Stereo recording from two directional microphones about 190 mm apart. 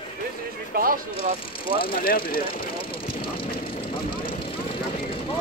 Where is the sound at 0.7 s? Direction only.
50° right (ahead or behind).